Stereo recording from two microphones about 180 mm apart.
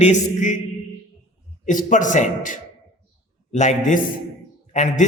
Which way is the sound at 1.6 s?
45° left (ahead or behind).